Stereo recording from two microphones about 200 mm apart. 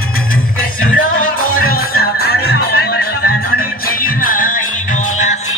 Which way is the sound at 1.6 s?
50° left (ahead or behind).